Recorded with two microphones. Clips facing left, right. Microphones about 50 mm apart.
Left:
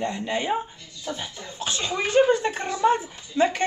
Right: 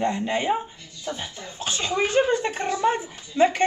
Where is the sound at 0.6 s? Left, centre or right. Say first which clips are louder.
Left 1 dB; centre.